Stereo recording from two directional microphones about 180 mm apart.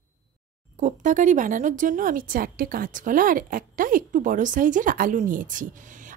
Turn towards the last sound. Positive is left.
turn(degrees=-45)  # may be behind; listen again after turning